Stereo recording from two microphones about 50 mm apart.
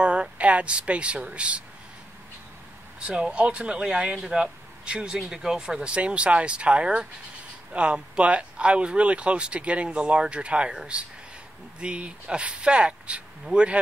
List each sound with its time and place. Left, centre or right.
0.0 s speech: right
3.1 s speech: right
11.8 s speech: right